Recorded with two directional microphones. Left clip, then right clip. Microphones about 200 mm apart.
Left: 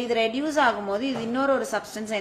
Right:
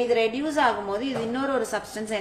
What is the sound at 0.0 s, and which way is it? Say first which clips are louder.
A woman's voice: right 1 dB; 25° left (ahead or behind).